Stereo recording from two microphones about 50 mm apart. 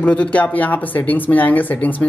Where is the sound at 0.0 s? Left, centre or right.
Left.